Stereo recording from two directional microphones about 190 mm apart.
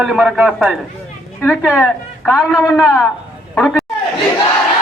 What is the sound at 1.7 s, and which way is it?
A man's voice, 10° left (ahead or behind).